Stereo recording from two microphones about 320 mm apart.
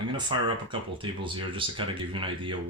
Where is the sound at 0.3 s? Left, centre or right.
Centre.